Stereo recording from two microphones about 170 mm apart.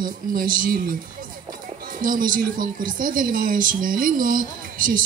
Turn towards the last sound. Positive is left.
turn(degrees=-55)  # may be behind; listen again after turning